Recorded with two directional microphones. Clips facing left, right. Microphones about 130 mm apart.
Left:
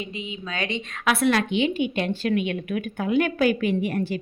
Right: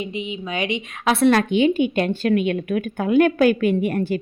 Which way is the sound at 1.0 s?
30° right (ahead or behind).